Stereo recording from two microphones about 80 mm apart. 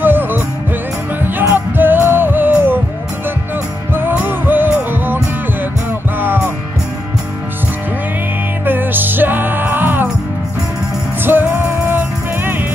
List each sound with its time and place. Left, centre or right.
0.0 s music: right
1.5 s music: right
4.1 s music: right
8.6 s music: right
11.2 s music: right